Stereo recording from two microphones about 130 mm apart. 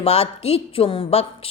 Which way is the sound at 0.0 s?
50° left (ahead or behind).